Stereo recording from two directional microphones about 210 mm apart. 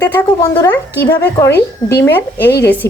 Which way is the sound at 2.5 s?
50° left (ahead or behind).